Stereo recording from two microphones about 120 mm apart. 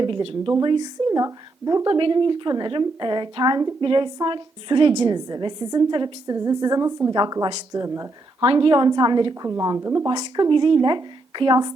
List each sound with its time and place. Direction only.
0.6 s a woman's voice: 40° right (ahead or behind)
2.0 s a woman's voice: 45° right (ahead or behind)
8.4 s a woman's voice: 45° right (ahead or behind)